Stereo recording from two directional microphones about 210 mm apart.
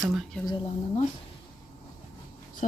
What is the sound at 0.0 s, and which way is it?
Speech, centre (ahead or behind).